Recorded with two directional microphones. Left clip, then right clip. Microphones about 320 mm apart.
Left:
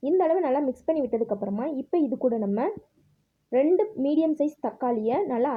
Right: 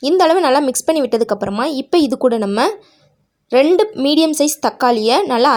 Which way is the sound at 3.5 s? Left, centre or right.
Right.